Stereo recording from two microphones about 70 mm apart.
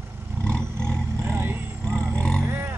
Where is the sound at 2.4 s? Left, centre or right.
Right.